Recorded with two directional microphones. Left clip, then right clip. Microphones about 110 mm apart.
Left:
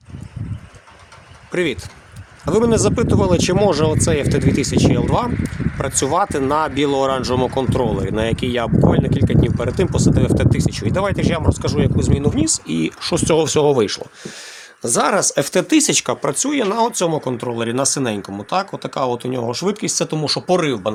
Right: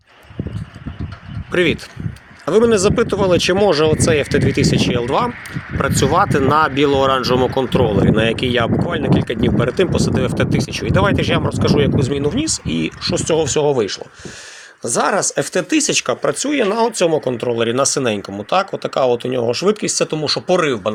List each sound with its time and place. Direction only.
1.5 s speech: centre (ahead or behind); by 12.7 s 20° left (ahead or behind)
13.0 s speech: 70° left (ahead or behind)
14.8 s speech: 50° left (ahead or behind)
16.2 s speech: 20° left (ahead or behind)